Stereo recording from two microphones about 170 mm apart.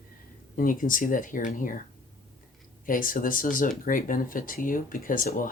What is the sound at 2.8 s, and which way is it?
Speech, 55° left (ahead or behind).